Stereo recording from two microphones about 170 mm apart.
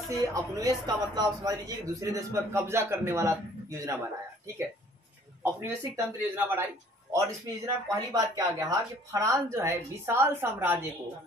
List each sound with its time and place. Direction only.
0.1 s a man's voice: 20° right (ahead or behind)
5.4 s speech: 15° right (ahead or behind)